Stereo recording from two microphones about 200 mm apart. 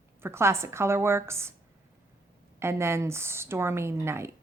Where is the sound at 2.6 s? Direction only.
15° right (ahead or behind).